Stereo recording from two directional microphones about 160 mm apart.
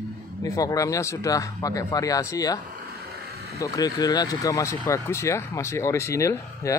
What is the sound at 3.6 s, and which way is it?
Speech, 25° left (ahead or behind).